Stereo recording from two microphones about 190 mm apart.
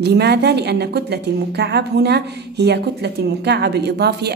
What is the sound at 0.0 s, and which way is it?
A woman's voice, 60° right (ahead or behind).